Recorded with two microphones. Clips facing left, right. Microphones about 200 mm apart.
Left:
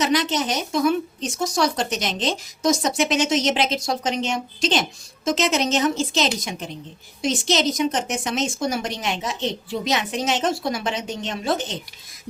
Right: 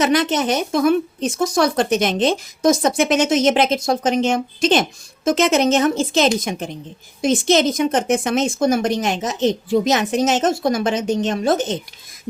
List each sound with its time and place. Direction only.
0.0 s speech: 55° right (ahead or behind)